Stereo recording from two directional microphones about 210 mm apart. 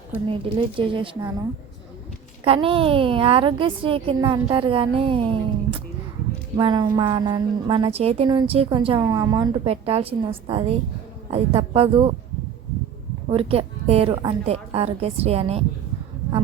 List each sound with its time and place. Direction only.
0.3 s a woman's voice: 25° right (ahead or behind)
6.6 s a woman's voice: 20° right (ahead or behind)
13.3 s a woman's voice: 25° right (ahead or behind)